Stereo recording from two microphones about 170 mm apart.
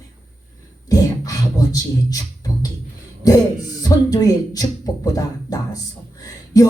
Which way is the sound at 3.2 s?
20° left (ahead or behind).